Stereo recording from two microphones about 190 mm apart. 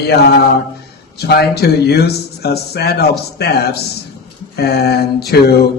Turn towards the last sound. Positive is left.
turn(degrees=55)  # may be behind; listen again after turning